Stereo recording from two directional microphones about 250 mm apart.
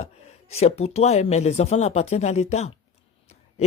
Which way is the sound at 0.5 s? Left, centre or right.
Left.